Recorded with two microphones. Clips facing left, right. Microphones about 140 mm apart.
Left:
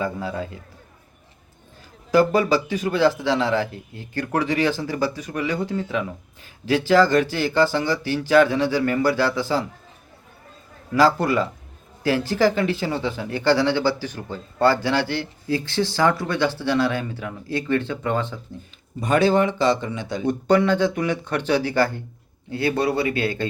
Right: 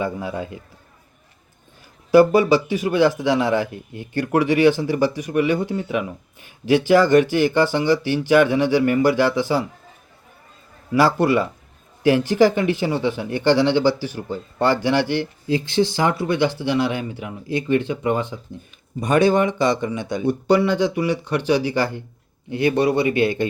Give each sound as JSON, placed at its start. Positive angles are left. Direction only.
{"t": 0.0, "sound": "a man's voice", "side_deg": -15}
{"t": 2.1, "sound": "a man's voice", "side_deg": -15}
{"t": 12.0, "sound": "a man's voice", "side_deg": -15}